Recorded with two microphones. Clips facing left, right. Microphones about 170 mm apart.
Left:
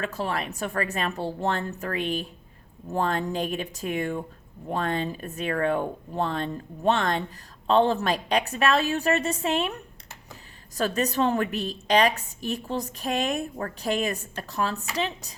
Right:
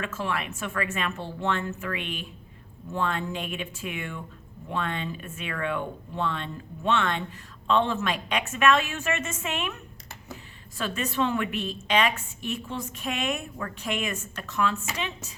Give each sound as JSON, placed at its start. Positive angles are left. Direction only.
{"t": 0.0, "sound": "a woman's voice", "side_deg": 35}